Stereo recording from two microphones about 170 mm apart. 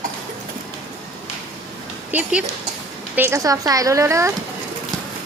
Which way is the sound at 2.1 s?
5° right (ahead or behind).